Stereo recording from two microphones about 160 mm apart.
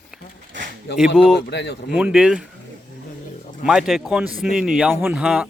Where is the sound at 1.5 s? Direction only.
90° left.